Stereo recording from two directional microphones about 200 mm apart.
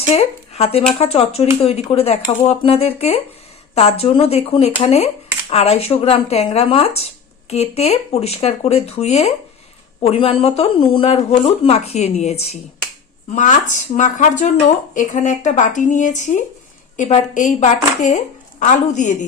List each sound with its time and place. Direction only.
0.1 s speech: 30° left (ahead or behind)